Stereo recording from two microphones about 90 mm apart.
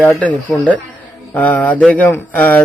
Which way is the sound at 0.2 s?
15° left (ahead or behind).